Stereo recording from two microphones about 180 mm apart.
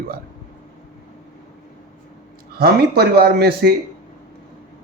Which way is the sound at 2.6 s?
60° right (ahead or behind).